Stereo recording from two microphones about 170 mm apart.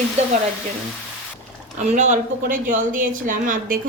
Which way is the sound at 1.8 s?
45° right (ahead or behind).